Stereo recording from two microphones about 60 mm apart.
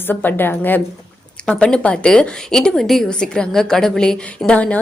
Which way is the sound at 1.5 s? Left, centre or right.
Centre.